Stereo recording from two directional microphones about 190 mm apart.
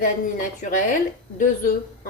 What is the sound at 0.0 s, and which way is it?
Speech, 45° left (ahead or behind).